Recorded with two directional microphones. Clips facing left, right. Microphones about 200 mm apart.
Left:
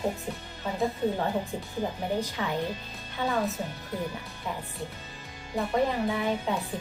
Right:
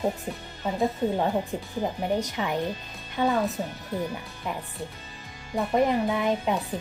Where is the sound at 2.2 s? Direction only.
15° right (ahead or behind).